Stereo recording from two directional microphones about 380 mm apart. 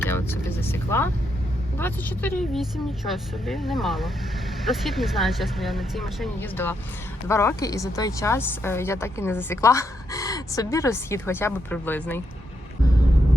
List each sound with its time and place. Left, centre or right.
0.0 s vehicle: centre
1.8 s a woman's voice: centre